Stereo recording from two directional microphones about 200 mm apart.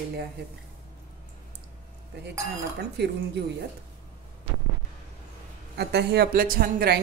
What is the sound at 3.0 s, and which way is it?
Speech, 55° right (ahead or behind).